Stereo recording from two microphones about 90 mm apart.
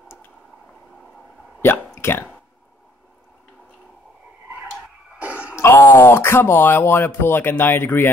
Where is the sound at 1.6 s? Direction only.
25° left (ahead or behind).